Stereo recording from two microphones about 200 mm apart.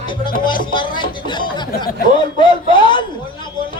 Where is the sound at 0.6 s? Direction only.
25° left (ahead or behind).